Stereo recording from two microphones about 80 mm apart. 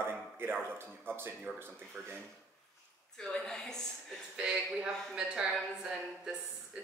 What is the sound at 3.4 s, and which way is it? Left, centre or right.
Speech, centre.